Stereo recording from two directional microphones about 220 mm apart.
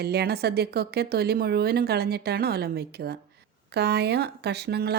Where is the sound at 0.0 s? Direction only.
45° right (ahead or behind).